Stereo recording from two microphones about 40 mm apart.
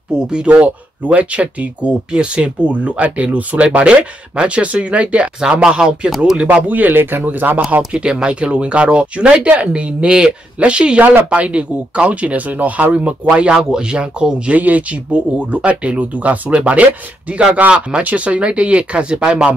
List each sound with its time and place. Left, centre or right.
0.1 s speech: right
0.5 s speech: right
5.4 s speech: centre
6.4 s a man's voice: right
7.9 s speech: right
12.9 s speech: right
13.5 s speech: centre
14.5 s speech: right